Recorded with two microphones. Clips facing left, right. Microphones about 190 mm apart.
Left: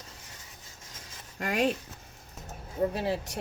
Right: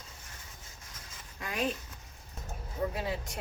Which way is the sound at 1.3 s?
85° left.